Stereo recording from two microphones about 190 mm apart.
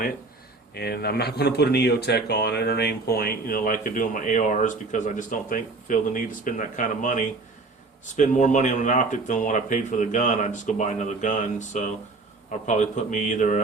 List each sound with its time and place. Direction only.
0.7 s speech: 55° left (ahead or behind); by 13.6 s 40° left (ahead or behind)